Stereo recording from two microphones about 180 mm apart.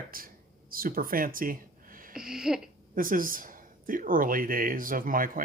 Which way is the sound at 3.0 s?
50° right (ahead or behind).